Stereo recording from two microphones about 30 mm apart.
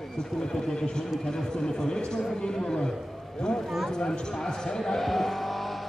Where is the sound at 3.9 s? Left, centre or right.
Left.